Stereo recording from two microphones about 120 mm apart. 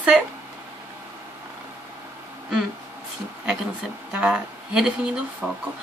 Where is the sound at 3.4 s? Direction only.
5° right (ahead or behind).